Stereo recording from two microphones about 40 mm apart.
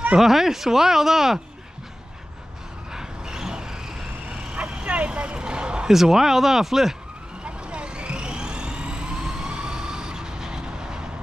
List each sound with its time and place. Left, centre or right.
0.2 s speech: centre
2.9 s vehicle: centre
4.6 s bow-wow: right
5.9 s speech: centre
7.4 s vehicle: right